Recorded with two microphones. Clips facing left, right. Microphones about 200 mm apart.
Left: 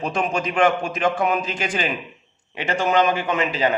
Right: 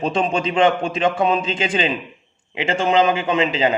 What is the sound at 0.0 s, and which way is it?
Speech, 25° right (ahead or behind).